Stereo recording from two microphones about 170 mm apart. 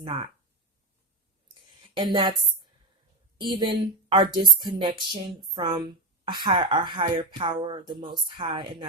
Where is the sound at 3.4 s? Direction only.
30° right (ahead or behind).